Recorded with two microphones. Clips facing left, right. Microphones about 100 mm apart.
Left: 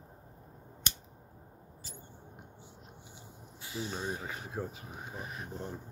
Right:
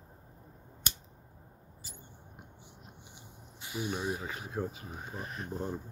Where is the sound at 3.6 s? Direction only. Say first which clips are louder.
Right 3 dB; 20° right (ahead or behind).